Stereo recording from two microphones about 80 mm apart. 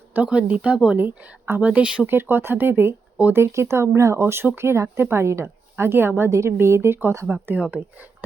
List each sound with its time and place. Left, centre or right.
0.1 s speech: centre
0.9 s speech: right
2.1 s a woman's voice: right
7.3 s speech: right